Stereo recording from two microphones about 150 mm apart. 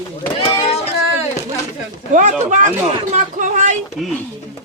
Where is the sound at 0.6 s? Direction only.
40° left (ahead or behind).